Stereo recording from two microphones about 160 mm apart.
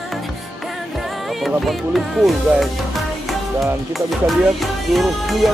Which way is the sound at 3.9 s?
Centre (ahead or behind).